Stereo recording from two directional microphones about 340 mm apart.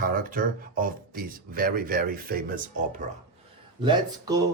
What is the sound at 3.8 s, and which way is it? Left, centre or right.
Speech, centre.